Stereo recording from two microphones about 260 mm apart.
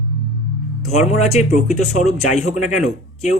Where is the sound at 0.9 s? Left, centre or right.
Left.